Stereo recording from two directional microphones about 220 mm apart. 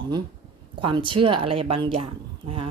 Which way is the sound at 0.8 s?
20° right (ahead or behind).